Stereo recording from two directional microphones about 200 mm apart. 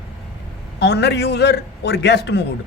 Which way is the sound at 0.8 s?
55° left (ahead or behind).